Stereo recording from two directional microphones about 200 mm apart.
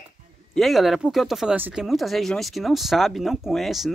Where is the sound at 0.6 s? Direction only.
Centre (ahead or behind).